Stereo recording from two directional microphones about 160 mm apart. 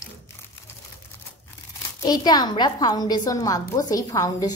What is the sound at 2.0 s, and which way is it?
A woman's voice, 25° left (ahead or behind).